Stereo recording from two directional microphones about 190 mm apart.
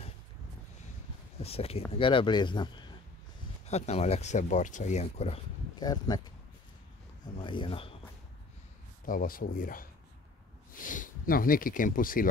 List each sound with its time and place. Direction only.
1.4 s speech: 30° left (ahead or behind)
3.6 s speech: 35° left (ahead or behind)
5.8 s speech: 20° left (ahead or behind)
7.3 s speech: 25° left (ahead or behind)
9.0 s speech: 50° left (ahead or behind)